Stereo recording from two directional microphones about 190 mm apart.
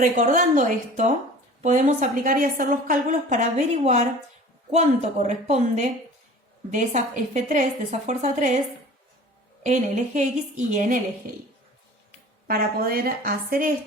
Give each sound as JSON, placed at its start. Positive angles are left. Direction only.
{"t": 0.0, "sound": "a woman's voice", "side_deg": -45}
{"t": 4.7, "sound": "a woman's voice", "side_deg": -35}
{"t": 9.6, "sound": "a woman's voice", "side_deg": -40}
{"t": 12.5, "sound": "a woman's voice", "side_deg": -50}